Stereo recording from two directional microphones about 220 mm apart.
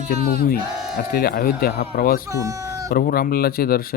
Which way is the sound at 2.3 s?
15° right (ahead or behind).